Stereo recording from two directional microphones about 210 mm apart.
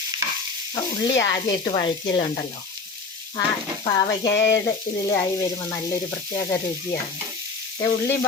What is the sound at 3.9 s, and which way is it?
Sizzle, 20° left (ahead or behind).